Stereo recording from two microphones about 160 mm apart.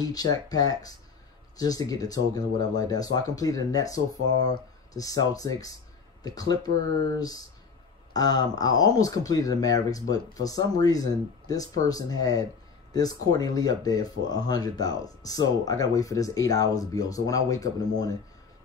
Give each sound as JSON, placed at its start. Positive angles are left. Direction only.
{"t": 0.0, "sound": "speech", "side_deg": 25}